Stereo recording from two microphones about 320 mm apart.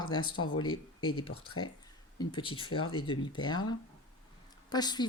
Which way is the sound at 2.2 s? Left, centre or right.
Centre.